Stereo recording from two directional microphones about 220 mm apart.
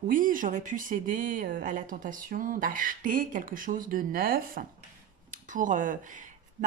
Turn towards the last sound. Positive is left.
turn(degrees=-35)  # may be behind; listen again after turning